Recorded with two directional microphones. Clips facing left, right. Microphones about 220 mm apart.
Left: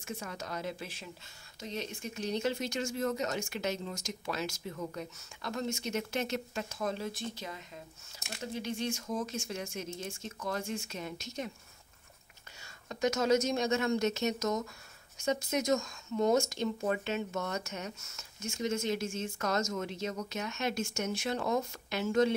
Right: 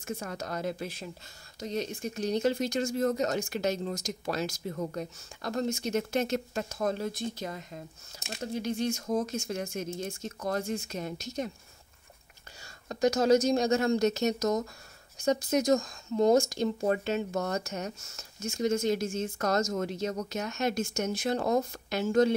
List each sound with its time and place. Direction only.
0.0 s a woman's voice: 40° right (ahead or behind)
12.8 s speech: 35° right (ahead or behind)